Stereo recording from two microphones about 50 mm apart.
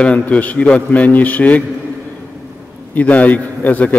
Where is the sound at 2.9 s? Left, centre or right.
Left.